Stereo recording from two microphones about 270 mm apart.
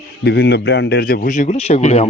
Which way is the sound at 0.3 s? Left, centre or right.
Left.